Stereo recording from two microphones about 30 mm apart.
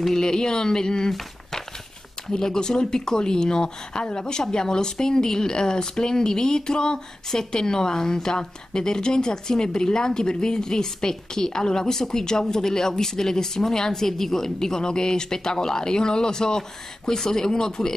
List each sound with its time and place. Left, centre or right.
0.1 s a woman's voice: left
2.2 s a woman's voice: centre